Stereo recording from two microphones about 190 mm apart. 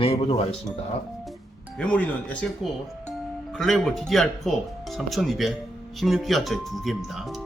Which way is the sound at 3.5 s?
Centre (ahead or behind).